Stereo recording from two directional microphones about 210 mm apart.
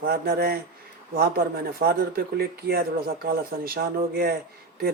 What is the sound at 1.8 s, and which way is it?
Speech, 45° right (ahead or behind).